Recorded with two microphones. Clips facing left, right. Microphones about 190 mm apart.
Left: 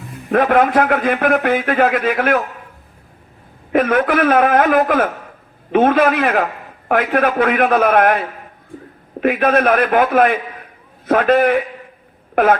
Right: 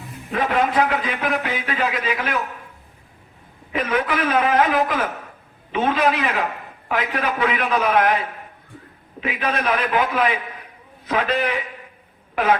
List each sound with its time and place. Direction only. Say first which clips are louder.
0.3 s a man's voice: left 7 dB; 55° left (ahead or behind)
3.7 s a man's voice: left 7 dB; 55° left (ahead or behind)